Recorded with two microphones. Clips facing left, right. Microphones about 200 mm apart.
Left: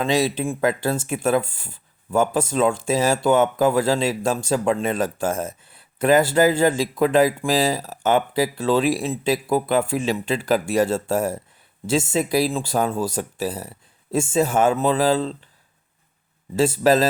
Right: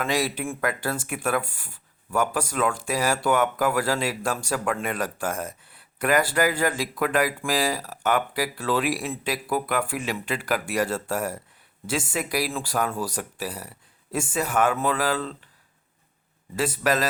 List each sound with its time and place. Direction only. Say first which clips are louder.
0.0 s speech: left 5 dB; 20° left (ahead or behind)
16.6 s speech: left 7 dB; 25° left (ahead or behind)